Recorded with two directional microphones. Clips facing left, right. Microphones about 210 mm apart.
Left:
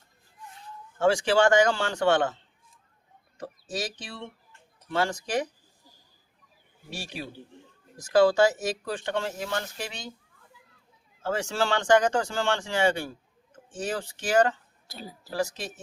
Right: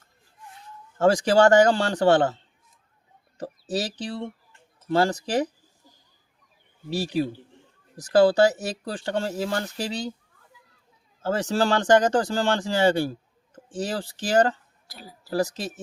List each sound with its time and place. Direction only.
0.9 s speech: 40° right (ahead or behind)
3.3 s speech: 35° right (ahead or behind)
6.9 s speech: 35° right (ahead or behind)
11.2 s speech: 35° right (ahead or behind)
14.8 s speech: 25° left (ahead or behind)
15.3 s speech: 35° right (ahead or behind)